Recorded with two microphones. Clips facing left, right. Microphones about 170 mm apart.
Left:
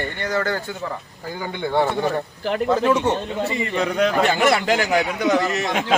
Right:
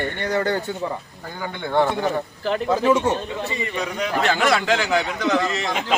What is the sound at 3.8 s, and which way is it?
Speech, 65° left (ahead or behind).